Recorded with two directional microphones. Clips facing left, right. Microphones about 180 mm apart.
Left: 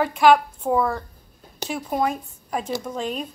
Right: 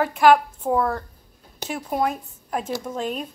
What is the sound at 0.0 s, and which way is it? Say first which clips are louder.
Speech: even; 5° right (ahead or behind).